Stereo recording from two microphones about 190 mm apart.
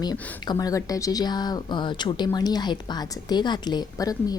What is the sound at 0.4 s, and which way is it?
A woman's voice, 20° left (ahead or behind).